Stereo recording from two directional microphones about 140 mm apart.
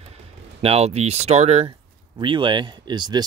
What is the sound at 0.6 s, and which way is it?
Speech, 45° right (ahead or behind).